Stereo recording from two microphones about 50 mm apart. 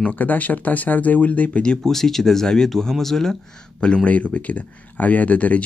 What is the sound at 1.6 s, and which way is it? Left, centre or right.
Speech, centre.